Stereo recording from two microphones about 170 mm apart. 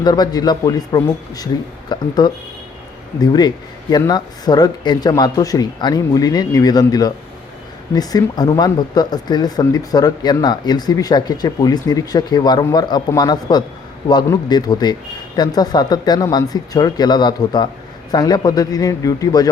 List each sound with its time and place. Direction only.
0.0 s speech: 25° left (ahead or behind)